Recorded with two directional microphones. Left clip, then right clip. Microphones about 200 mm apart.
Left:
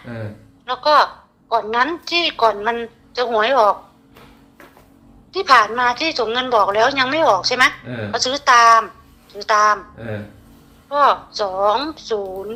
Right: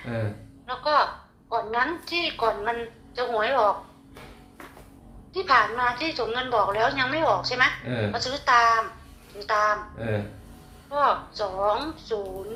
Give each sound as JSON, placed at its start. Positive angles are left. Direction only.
{"t": 0.6, "sound": "music", "side_deg": 45}
{"t": 1.5, "sound": "a woman's voice", "side_deg": 45}
{"t": 5.3, "sound": "a woman's voice", "side_deg": 45}
{"t": 10.8, "sound": "a woman's voice", "side_deg": 45}